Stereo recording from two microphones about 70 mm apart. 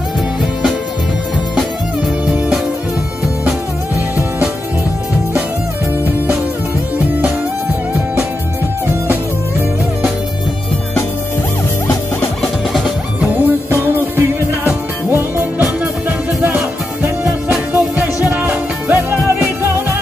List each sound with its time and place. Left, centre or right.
8.8 s music: right
12.4 s music: centre
13.2 s music: right
15.8 s music: right
17.7 s music: right